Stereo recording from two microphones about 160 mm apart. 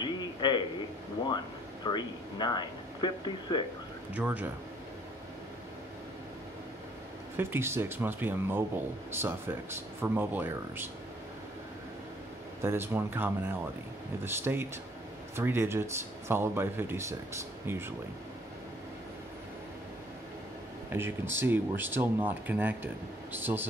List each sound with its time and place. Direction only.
0.0 s a sound: 30° left (ahead or behind)
1.9 s speech: 30° left (ahead or behind)
4.1 s speech: 10° right (ahead or behind)
7.3 s speech: 15° right (ahead or behind)
12.6 s speech: 15° right (ahead or behind)
20.9 s speech: 15° right (ahead or behind)